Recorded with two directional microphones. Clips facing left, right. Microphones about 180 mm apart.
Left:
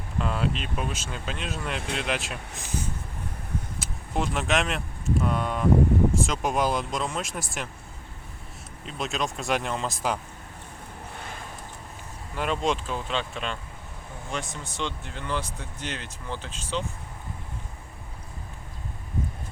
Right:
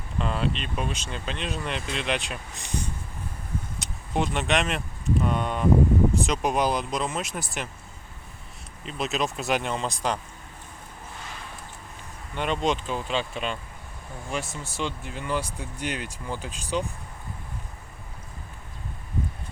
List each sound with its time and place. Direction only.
0.2 s speech: 5° left (ahead or behind)
8.8 s speech: centre (ahead or behind)
11.2 s a sound: 50° left (ahead or behind)
12.3 s speech: centre (ahead or behind)